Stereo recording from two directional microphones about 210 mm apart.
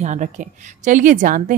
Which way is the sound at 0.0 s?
35° right (ahead or behind).